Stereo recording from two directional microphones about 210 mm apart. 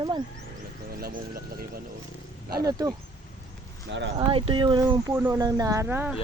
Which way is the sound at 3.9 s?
55° right (ahead or behind).